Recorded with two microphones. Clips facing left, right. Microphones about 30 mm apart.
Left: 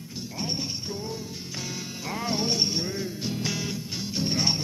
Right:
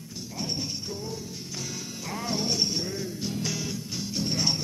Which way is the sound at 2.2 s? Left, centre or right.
Centre.